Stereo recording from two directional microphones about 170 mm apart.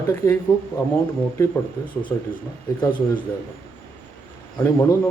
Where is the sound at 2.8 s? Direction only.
25° left (ahead or behind).